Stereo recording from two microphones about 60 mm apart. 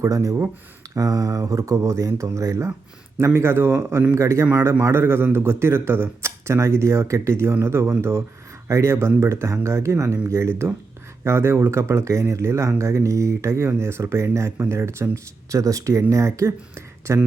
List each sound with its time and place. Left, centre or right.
0.0 s speech: right